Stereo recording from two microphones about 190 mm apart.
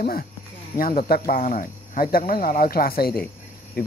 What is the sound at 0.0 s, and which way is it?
Speech, 50° left (ahead or behind).